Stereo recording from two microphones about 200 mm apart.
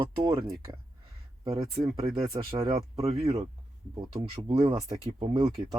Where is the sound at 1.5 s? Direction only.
30° right (ahead or behind).